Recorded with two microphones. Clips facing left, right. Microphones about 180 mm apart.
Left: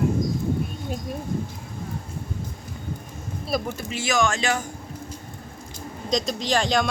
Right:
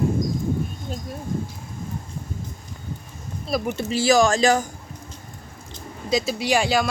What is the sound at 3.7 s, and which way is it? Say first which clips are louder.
Speech: right 7 dB; 30° right (ahead or behind).